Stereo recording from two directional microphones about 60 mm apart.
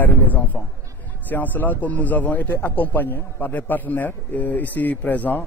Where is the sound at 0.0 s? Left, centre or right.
Left.